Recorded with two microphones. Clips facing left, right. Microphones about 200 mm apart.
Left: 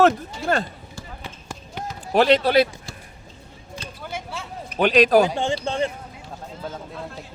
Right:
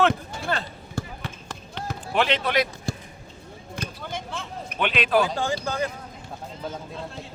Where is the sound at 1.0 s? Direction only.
55° right (ahead or behind).